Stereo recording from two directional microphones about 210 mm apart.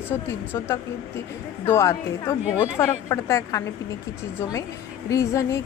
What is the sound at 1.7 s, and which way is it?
Speech, 15° left (ahead or behind).